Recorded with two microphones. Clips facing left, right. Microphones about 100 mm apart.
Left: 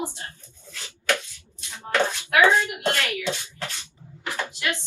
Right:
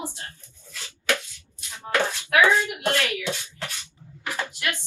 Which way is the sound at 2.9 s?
20° right (ahead or behind).